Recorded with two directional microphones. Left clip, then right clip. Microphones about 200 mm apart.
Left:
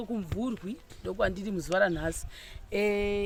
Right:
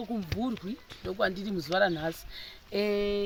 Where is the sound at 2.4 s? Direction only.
35° left (ahead or behind).